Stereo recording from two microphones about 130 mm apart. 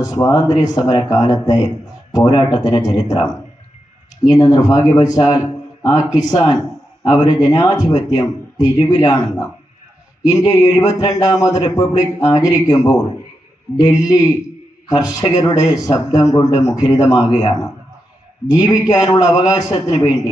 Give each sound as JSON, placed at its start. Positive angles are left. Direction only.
{"t": 0.0, "sound": "speech", "side_deg": 30}
{"t": 4.3, "sound": "speech", "side_deg": 30}